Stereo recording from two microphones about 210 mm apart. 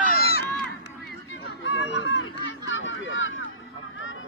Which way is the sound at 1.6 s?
60° left (ahead or behind).